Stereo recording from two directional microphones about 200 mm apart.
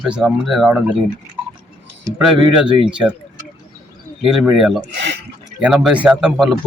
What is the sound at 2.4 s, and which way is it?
Speech, 25° right (ahead or behind).